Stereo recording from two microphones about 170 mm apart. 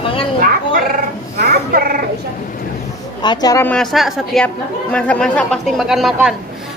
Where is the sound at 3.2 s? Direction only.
25° left (ahead or behind).